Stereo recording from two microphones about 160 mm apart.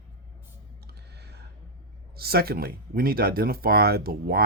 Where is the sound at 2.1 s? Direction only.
75° right (ahead or behind).